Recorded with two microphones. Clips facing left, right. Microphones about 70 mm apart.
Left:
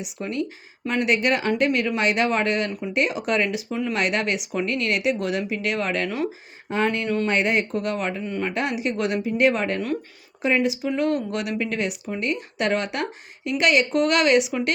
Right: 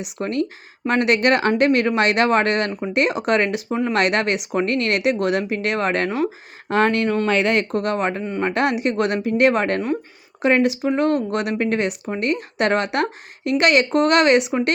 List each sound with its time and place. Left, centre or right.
0.0 s speech: right
3.7 s speech: right
3.9 s speech: right
6.7 s speech: right
7.4 s speech: right
7.7 s speech: right
10.8 s speech: right